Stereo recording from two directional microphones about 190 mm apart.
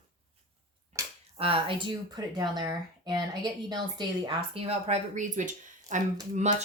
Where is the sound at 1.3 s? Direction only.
30° right (ahead or behind).